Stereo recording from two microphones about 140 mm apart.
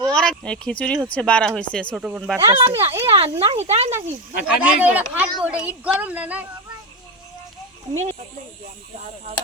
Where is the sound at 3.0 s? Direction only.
45° right (ahead or behind).